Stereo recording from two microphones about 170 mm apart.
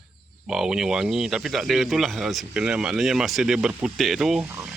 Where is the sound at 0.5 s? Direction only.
Centre (ahead or behind).